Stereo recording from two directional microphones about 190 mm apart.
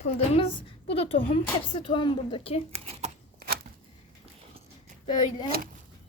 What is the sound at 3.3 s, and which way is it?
Shuffling cards, 50° right (ahead or behind).